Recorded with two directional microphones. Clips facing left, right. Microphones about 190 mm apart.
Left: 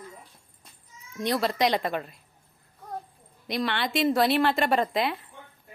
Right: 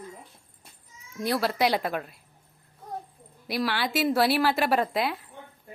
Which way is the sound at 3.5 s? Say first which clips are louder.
Even; 5° right (ahead or behind).